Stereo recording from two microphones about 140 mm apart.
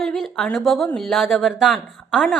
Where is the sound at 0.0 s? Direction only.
Centre (ahead or behind).